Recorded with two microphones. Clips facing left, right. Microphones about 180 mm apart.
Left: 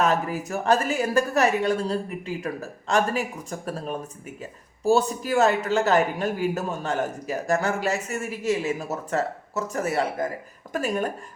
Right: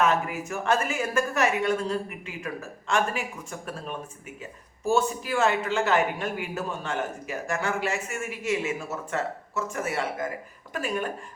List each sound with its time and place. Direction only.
0.0 s speech: 35° left (ahead or behind)